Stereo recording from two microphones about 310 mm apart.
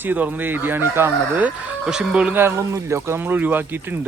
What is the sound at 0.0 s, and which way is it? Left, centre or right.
Speech, centre.